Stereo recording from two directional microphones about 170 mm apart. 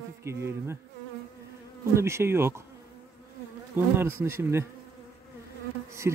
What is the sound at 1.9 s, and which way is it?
Speech, 15° right (ahead or behind).